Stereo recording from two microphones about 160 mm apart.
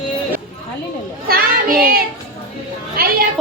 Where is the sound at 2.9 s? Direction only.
70° right (ahead or behind).